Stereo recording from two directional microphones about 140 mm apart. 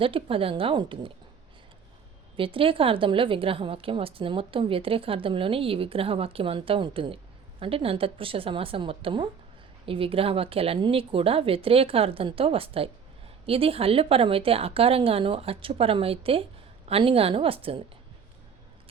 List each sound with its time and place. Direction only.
0.0 s a woman's voice: 40° right (ahead or behind)
2.3 s a woman's voice: 40° right (ahead or behind)